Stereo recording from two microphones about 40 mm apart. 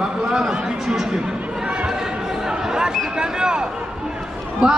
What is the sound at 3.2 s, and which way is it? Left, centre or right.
Speech, right.